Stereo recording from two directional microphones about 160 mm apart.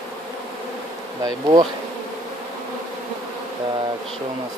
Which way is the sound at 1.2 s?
25° right (ahead or behind).